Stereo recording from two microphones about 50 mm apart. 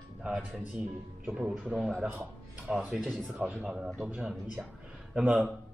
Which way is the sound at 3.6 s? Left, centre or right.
Centre.